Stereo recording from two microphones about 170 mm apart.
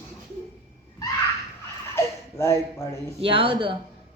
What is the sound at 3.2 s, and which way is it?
Speech, 30° right (ahead or behind).